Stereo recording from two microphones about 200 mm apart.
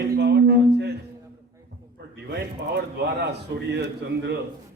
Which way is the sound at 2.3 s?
55° right (ahead or behind).